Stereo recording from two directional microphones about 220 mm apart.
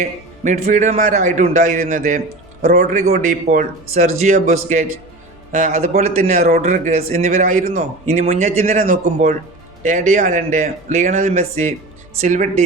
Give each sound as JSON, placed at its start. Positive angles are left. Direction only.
{"t": 0.0, "sound": "a man's voice", "side_deg": -35}